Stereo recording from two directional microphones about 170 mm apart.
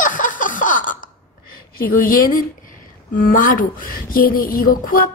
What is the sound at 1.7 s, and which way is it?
A woman's voice, 55° left (ahead or behind).